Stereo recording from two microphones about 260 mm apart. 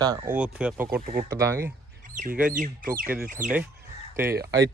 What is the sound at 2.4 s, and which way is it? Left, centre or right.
Speech, right.